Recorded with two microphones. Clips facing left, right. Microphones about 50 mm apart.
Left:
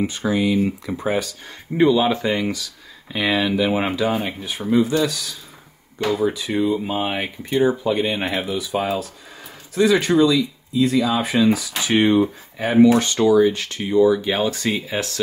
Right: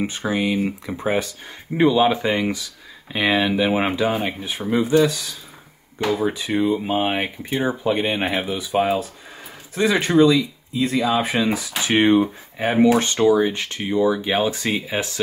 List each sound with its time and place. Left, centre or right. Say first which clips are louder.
0.0 s speech: left 2 dB; right
0.9 s speech: right 2 dB; right
1.8 s speech: even; centre
8.5 s speech: right 2 dB; right